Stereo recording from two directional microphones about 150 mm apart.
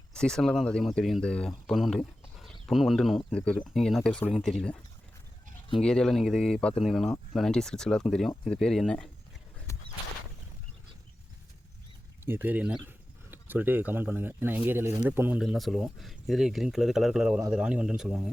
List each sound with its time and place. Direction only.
0.1 s speech: 5° left (ahead or behind)
5.8 s speech: 5° left (ahead or behind)
9.7 s a sound: 20° left (ahead or behind)
12.2 s speech: 15° right (ahead or behind)
15.4 s speech: centre (ahead or behind)